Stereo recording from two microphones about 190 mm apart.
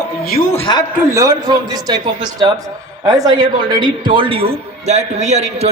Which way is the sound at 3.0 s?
20° right (ahead or behind).